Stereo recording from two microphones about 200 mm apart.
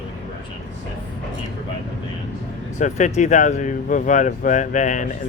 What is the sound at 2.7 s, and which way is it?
Speech, 40° left (ahead or behind).